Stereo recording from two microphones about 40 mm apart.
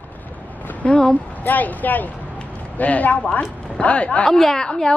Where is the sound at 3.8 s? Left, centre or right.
Left.